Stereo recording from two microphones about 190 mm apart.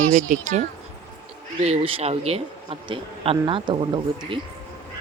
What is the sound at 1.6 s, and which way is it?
Speech, 30° right (ahead or behind).